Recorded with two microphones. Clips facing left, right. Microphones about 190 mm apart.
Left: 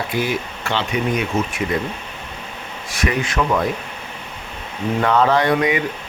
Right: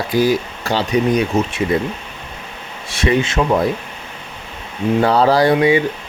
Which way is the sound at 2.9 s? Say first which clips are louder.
Right 5 dB; 25° right (ahead or behind).